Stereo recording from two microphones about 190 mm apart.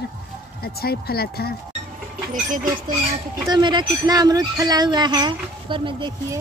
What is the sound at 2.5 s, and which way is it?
Speech, 45° right (ahead or behind).